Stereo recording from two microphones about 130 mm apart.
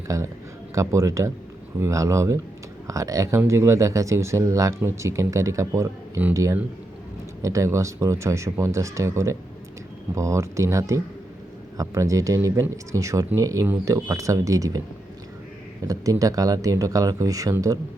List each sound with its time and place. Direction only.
0.1 s speech: 25° right (ahead or behind)
15.9 s speech: 25° right (ahead or behind)